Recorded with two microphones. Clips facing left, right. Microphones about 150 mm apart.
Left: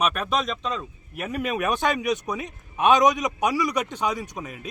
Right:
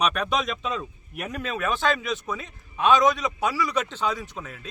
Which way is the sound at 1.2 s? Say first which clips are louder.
Left 3 dB; 10° left (ahead or behind).